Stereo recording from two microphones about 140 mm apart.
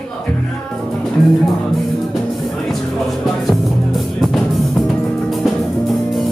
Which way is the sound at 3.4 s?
Centre (ahead or behind).